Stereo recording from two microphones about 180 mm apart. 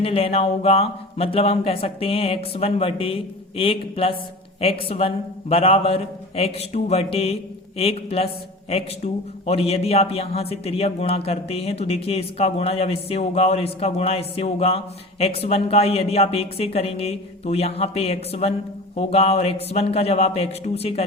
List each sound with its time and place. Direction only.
0.0 s speech: 35° left (ahead or behind)
9.5 s speech: 35° left (ahead or behind)